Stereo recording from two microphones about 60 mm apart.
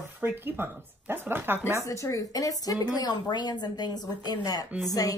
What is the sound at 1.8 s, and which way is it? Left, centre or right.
Speech, left.